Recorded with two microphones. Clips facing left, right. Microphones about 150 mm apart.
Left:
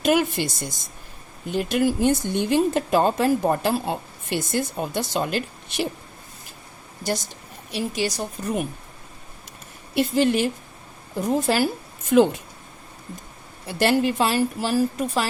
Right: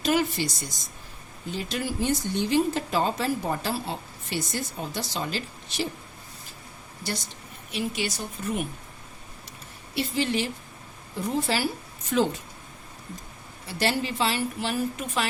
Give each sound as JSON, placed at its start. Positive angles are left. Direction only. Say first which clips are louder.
{"t": 0.0, "sound": "a woman's voice", "louder": "left 4 dB", "side_deg": 55}
{"t": 7.7, "sound": "a woman's voice", "louder": "left 4 dB", "side_deg": 40}
{"t": 9.9, "sound": "a woman's voice", "louder": "left 7 dB", "side_deg": 50}
{"t": 13.7, "sound": "a woman's voice", "louder": "left 7 dB", "side_deg": 55}